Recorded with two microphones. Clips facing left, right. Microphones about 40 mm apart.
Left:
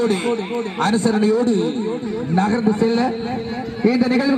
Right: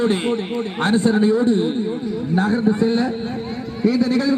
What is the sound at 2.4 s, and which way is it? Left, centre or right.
Speech, centre.